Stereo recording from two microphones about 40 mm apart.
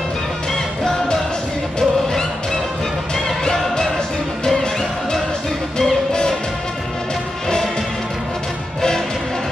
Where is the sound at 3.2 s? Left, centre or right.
Centre.